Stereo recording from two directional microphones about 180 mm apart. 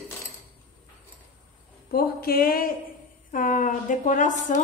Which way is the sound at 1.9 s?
55° left (ahead or behind).